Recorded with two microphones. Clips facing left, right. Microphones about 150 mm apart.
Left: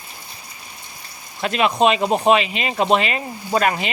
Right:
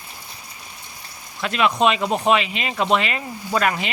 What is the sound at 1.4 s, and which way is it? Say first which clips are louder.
Speech: left 2 dB; 35° left (ahead or behind).